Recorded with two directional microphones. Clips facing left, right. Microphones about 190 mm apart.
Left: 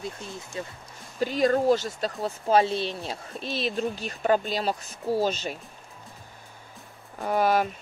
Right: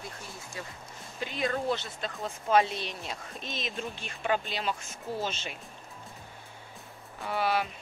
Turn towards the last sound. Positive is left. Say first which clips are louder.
# left 6 dB
turn(degrees=45)  # may be behind; listen again after turning